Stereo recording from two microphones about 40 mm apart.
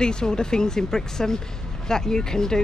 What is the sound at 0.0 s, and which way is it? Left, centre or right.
Speech, centre.